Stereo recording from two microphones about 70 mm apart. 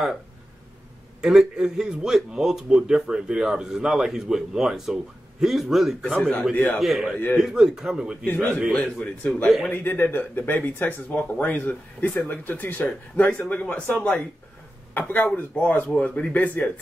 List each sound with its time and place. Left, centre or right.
1.2 s a man's voice: centre
6.5 s speech: left
6.8 s a man's voice: centre
8.3 s speech: left